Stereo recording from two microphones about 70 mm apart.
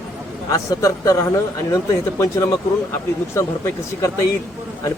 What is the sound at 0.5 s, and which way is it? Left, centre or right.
A man's voice, left.